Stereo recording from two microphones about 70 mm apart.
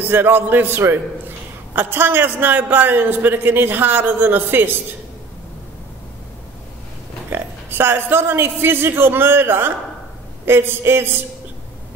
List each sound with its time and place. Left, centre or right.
0.0 s a man's voice: right
7.2 s a man's voice: right